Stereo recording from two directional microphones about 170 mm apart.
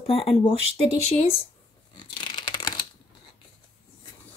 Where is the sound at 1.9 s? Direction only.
25° left (ahead or behind).